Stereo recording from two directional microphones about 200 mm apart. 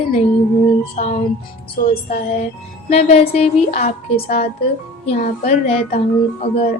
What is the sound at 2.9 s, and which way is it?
A woman's voice, 30° left (ahead or behind).